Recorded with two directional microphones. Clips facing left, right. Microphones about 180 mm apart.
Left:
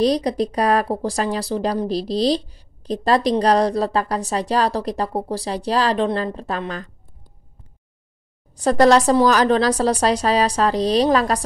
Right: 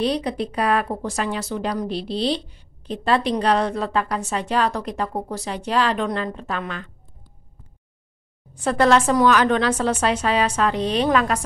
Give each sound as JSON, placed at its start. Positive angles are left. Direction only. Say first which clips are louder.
{"t": 0.0, "sound": "speech", "louder": "left 4 dB", "side_deg": 40}
{"t": 8.5, "sound": "speech", "louder": "left 3 dB", "side_deg": 35}